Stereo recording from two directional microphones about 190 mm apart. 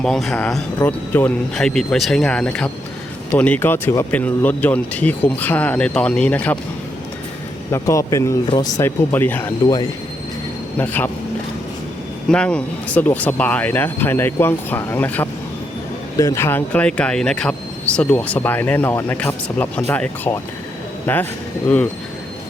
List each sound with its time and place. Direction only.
0.0 s speech: centre (ahead or behind)
7.7 s speech: 15° left (ahead or behind)
10.8 s speech: 10° left (ahead or behind)
12.3 s speech: 5° left (ahead or behind)